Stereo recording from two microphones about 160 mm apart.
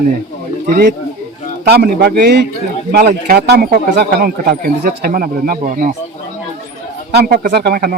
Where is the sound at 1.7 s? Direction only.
75° right (ahead or behind).